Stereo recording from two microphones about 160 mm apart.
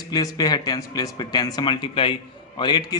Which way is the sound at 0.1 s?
25° left (ahead or behind).